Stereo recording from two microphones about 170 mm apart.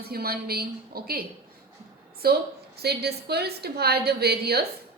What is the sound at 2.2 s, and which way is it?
A woman's voice, 65° right (ahead or behind).